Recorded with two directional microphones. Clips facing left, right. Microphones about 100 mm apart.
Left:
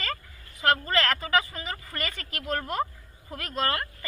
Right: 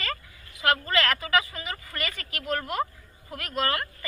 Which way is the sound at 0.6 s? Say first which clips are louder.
Even; 30° left (ahead or behind).